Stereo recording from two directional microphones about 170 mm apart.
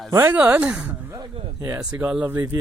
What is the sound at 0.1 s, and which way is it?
Speech, 15° right (ahead or behind).